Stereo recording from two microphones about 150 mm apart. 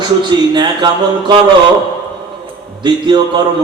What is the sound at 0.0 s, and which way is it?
Speech, 30° right (ahead or behind).